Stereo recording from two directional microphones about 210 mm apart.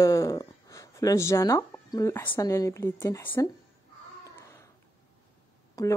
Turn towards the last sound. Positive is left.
turn(degrees=15)  # may be behind; listen again after turning